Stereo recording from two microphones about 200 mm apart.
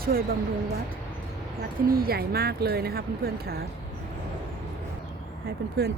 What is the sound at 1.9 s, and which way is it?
Speech, 50° right (ahead or behind).